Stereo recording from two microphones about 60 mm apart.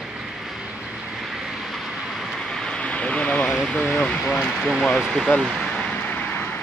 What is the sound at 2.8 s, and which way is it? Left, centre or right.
Vehicle, left.